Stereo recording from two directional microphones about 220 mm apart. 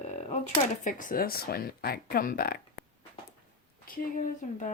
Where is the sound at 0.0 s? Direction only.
30° left (ahead or behind).